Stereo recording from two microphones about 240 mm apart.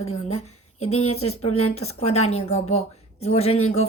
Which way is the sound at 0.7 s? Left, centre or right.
Left.